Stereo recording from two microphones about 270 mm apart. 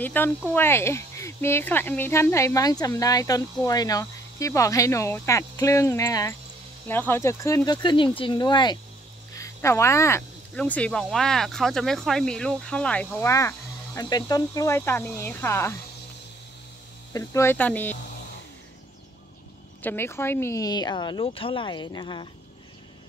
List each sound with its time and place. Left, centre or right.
0.0 s speech: centre
17.1 s speech: centre
19.8 s speech: centre